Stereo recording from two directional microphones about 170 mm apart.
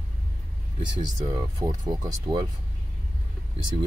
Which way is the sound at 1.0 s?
25° right (ahead or behind).